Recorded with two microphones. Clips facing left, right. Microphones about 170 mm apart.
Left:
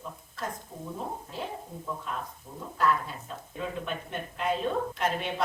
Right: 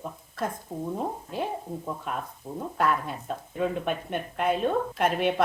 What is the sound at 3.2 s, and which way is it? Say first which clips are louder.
Speech: right 8 dB; 60° right (ahead or behind).